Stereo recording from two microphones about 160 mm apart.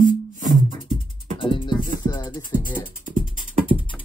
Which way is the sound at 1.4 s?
30° left (ahead or behind).